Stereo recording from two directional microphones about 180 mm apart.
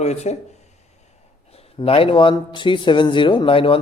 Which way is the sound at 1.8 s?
30° left (ahead or behind).